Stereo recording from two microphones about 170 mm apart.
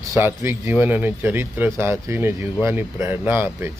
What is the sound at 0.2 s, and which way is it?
Speech, 15° right (ahead or behind).